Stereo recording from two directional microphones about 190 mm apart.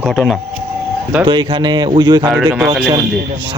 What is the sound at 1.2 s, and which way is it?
Speech, 25° right (ahead or behind).